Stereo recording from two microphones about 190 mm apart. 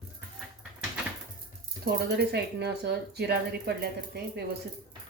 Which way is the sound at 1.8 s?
60° right (ahead or behind).